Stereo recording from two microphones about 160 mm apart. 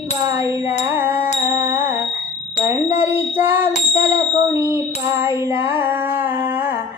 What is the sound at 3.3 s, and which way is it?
Female singing, 15° right (ahead or behind).